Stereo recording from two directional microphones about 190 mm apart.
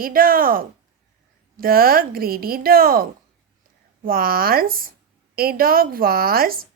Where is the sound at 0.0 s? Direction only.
50° right (ahead or behind).